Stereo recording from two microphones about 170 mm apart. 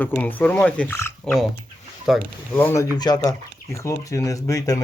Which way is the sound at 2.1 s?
Centre (ahead or behind).